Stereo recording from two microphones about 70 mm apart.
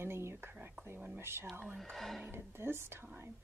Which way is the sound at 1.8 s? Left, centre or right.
Centre.